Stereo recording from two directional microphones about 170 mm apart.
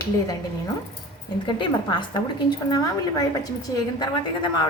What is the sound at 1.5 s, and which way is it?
A woman's voice, 30° left (ahead or behind).